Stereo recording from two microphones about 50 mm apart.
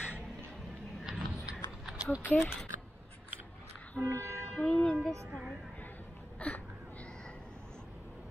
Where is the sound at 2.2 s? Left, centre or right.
Left.